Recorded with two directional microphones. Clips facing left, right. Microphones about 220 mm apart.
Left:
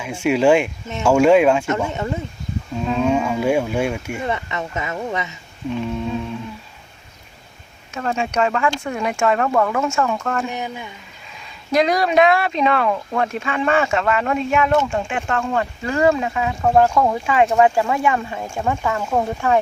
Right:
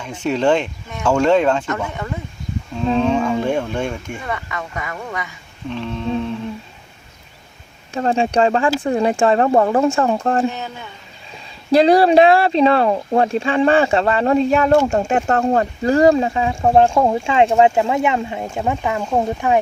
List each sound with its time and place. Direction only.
0.0 s speech: 10° left (ahead or behind)
1.6 s speech: 25° left (ahead or behind)
3.0 s speech: 10° left (ahead or behind)
4.2 s speech: 25° left (ahead or behind)
5.7 s speech: 10° left (ahead or behind)
7.9 s speech: 30° right (ahead or behind)
10.5 s speech: 15° left (ahead or behind)
11.7 s speech: 30° right (ahead or behind)